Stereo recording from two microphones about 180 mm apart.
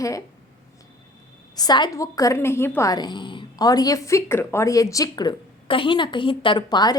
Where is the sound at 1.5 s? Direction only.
20° left (ahead or behind).